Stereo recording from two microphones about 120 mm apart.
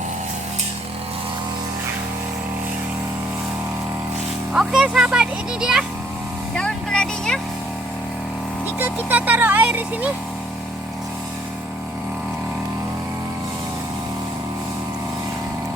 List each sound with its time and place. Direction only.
4.5 s a child's voice: 5° right (ahead or behind)
6.6 s a sound: 5° left (ahead or behind)
8.8 s a child's voice: 15° right (ahead or behind)